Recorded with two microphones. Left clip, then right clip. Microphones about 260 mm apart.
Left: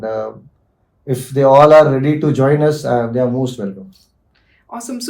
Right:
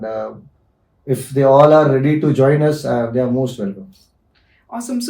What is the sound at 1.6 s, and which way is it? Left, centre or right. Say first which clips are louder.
Speech: left 3 dB; left.